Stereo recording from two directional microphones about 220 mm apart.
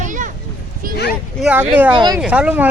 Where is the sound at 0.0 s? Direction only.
35° right (ahead or behind).